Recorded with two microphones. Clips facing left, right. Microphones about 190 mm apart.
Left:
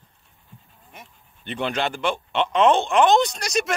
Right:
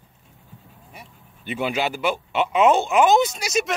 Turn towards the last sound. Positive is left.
turn(degrees=-5)  # may be behind; listen again after turning